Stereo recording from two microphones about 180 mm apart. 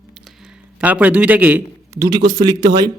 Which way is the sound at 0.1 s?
Centre (ahead or behind).